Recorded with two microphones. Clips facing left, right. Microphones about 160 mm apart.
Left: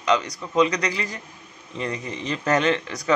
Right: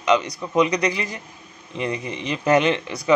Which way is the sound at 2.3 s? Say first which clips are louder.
Right 3 dB; 15° right (ahead or behind).